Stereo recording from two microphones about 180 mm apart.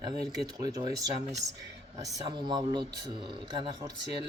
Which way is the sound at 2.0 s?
25° right (ahead or behind).